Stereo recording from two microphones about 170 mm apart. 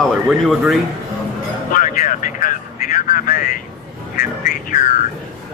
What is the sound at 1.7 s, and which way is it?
Vehicle, 50° left (ahead or behind).